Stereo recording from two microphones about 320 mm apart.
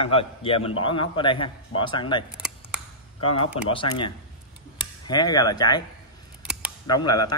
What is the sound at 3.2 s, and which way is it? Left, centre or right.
Speech, centre.